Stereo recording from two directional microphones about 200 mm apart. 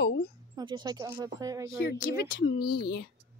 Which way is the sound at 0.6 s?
20° right (ahead or behind).